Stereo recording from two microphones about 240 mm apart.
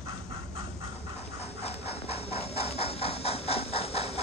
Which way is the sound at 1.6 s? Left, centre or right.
Left.